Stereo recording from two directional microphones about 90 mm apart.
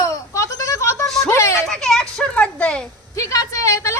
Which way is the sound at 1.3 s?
30° left (ahead or behind).